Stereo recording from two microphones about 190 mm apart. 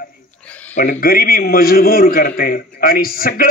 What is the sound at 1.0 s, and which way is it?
A man's voice, 50° left (ahead or behind).